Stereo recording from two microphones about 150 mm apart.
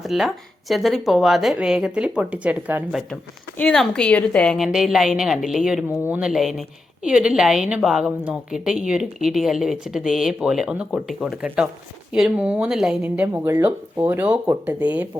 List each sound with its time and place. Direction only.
0.0 s a woman's voice: centre (ahead or behind)
3.6 s a woman's voice: 5° left (ahead or behind)